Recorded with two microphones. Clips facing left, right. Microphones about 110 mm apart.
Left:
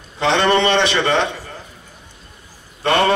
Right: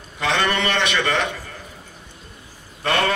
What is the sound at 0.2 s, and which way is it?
A man's voice, 30° left (ahead or behind).